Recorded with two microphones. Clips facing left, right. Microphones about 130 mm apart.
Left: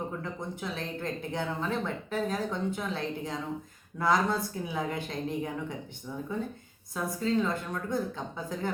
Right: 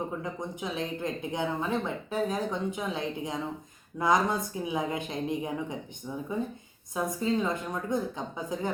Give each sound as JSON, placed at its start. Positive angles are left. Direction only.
{"t": 0.2, "sound": "speech", "side_deg": -15}
{"t": 6.9, "sound": "speech", "side_deg": -15}